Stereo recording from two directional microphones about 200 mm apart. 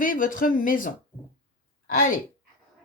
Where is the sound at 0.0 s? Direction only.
45° left (ahead or behind).